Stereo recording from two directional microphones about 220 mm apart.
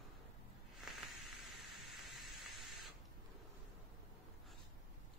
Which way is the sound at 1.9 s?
Centre (ahead or behind).